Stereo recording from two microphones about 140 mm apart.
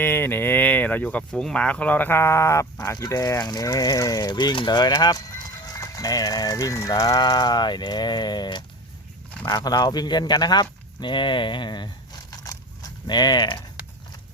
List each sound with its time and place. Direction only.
0.0 s speech: 15° left (ahead or behind); by 11.9 s 35° left (ahead or behind)
12.3 s a sound: 25° left (ahead or behind)
13.1 s speech: 30° left (ahead or behind)